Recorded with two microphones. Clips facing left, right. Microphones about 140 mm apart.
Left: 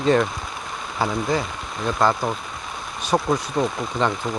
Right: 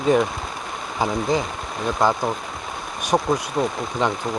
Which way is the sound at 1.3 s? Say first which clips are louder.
Right 1 dB; 20° right (ahead or behind).